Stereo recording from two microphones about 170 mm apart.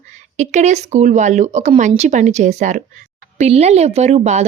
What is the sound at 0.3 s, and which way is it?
Speech, 40° right (ahead or behind).